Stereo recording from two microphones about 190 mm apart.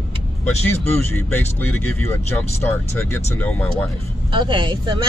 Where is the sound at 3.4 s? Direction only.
10° left (ahead or behind).